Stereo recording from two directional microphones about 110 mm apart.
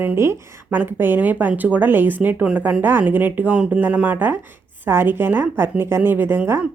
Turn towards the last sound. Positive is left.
turn(degrees=-20)  # may be behind; listen again after turning